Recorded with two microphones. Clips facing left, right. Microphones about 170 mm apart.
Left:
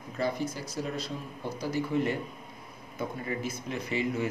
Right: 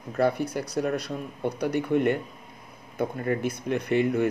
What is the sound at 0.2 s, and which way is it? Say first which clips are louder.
Speech: right 7 dB; 65° right (ahead or behind).